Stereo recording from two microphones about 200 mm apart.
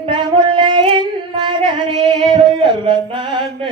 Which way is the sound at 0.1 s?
20° right (ahead or behind).